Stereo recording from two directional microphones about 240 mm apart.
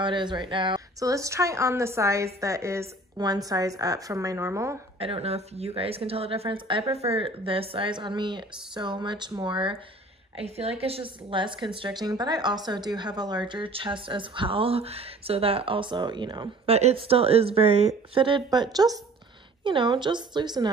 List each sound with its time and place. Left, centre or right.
0.0 s speech: centre
4.9 s a woman's voice: right